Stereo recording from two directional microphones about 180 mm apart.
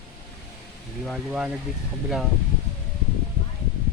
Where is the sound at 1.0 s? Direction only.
Centre (ahead or behind).